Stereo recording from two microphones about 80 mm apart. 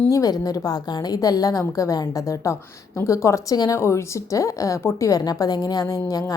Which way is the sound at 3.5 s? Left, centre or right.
Left.